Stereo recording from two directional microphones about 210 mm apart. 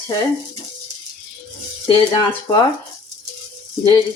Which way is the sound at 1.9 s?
20° left (ahead or behind).